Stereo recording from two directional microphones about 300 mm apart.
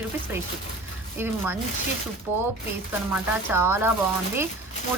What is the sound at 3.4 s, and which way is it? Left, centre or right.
Speech, centre.